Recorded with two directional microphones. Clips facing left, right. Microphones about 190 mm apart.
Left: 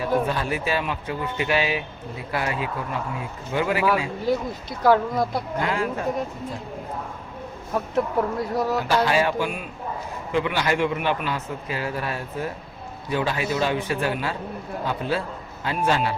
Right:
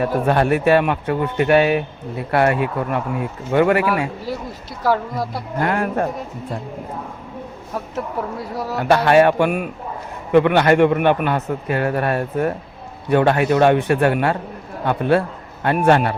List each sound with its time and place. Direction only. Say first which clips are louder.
0.0 s speech: right 6 dB; 60° right (ahead or behind)
4.8 s speech: left 1 dB; 5° right (ahead or behind)
5.5 s speech: right 7 dB; 60° right (ahead or behind)
7.9 s speech: left 3 dB; 5° right (ahead or behind)
8.8 s speech: right 11 dB; 60° right (ahead or behind)